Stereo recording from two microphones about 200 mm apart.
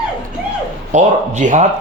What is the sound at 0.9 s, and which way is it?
Speech, 35° right (ahead or behind).